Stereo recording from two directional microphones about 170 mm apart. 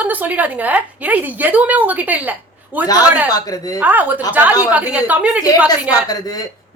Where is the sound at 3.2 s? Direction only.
20° left (ahead or behind).